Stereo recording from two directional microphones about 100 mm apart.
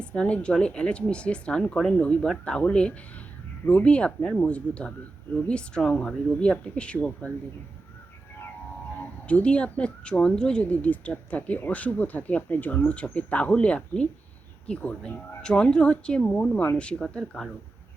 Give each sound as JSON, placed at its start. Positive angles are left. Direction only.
{"t": 0.0, "sound": "speech", "side_deg": 10}
{"t": 9.2, "sound": "speech", "side_deg": 10}